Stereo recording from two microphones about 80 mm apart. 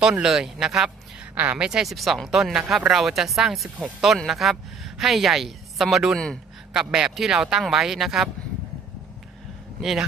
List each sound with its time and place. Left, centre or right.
0.0 s speech: centre
1.3 s speech: centre
1.7 s speech: centre
9.8 s speech: centre